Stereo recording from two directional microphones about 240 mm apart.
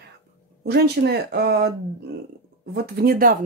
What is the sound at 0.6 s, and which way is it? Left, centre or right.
Speech, right.